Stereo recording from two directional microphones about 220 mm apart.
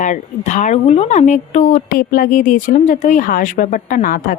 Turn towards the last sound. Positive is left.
turn(degrees=40)  # may be behind; listen again after turning